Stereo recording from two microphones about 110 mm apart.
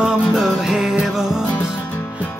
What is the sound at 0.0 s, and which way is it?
Music, 5° right (ahead or behind).